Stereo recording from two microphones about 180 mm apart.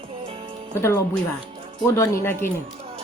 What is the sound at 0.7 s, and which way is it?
Speech, 15° left (ahead or behind).